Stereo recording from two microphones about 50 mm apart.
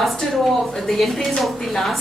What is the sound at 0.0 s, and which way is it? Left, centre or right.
A woman's voice, centre.